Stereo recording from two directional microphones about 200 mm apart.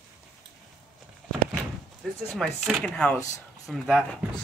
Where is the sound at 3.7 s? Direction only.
5° right (ahead or behind).